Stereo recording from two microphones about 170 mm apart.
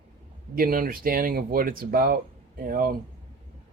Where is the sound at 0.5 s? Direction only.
55° right (ahead or behind).